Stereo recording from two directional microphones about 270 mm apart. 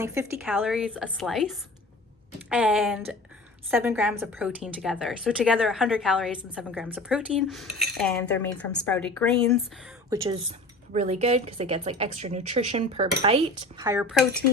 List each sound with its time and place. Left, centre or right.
0.0 s a woman's voice: centre
10.1 s speech: centre